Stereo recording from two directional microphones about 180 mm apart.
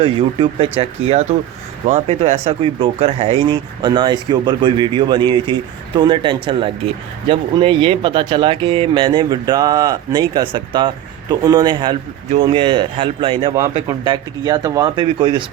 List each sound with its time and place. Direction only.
0.0 s speech: 30° right (ahead or behind)